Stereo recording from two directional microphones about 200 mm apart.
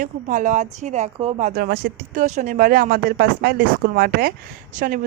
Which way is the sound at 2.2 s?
35° right (ahead or behind).